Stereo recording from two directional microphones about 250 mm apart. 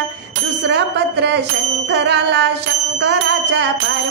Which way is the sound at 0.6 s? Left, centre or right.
Right.